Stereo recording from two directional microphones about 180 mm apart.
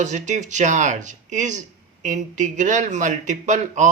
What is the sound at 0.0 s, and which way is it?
Speech, 40° right (ahead or behind).